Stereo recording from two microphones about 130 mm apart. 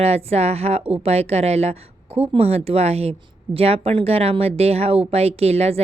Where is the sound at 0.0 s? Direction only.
50° right (ahead or behind).